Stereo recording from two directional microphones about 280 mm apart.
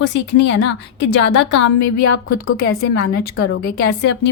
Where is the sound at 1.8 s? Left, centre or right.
Left.